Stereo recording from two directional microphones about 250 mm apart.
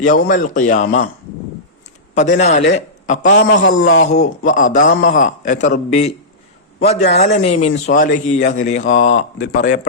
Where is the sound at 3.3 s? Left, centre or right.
Left.